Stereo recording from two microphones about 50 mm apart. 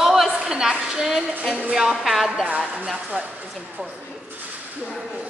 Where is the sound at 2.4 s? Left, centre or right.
Right.